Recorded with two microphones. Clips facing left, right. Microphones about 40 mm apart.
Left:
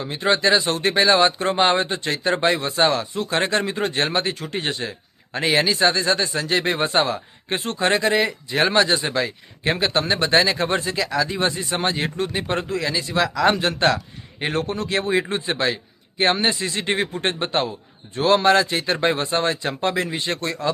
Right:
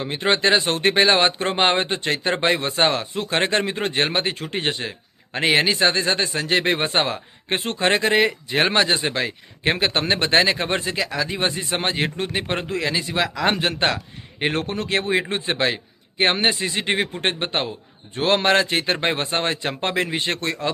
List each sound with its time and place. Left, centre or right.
0.0 s speech: right
18.1 s speech: right